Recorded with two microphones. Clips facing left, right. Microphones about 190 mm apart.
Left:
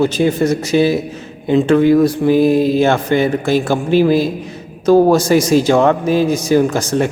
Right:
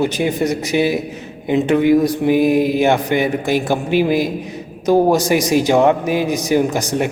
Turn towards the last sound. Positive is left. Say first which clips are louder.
# left 3 dB
turn(degrees=-15)  # may be behind; listen again after turning